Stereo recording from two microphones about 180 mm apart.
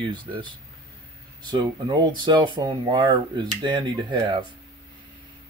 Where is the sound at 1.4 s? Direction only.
25° right (ahead or behind).